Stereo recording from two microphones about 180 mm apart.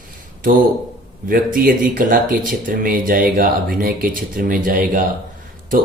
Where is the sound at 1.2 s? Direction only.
50° right (ahead or behind).